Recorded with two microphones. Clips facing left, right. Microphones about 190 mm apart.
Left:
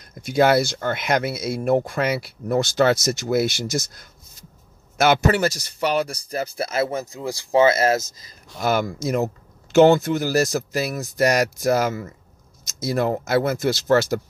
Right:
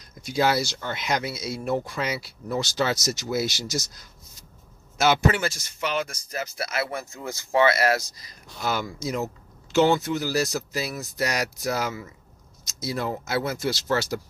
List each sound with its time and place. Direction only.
0.2 s a man's voice: 55° left (ahead or behind)
5.3 s speech: 40° left (ahead or behind); by 8.3 s 25° left (ahead or behind)
8.5 s speech: 55° left (ahead or behind)